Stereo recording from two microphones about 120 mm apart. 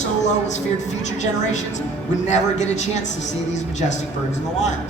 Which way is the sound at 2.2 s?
75° left (ahead or behind).